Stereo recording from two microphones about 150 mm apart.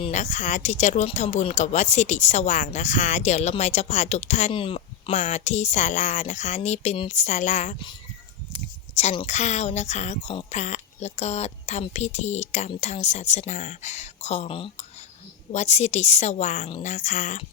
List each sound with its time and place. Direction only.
0.1 s speech: 55° left (ahead or behind)
4.5 s a sound: 35° left (ahead or behind)
5.1 s speech: 50° left (ahead or behind)
9.0 s speech: 45° left (ahead or behind)
15.5 s speech: 50° left (ahead or behind)